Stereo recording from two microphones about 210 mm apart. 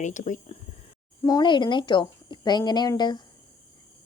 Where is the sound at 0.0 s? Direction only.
35° left (ahead or behind).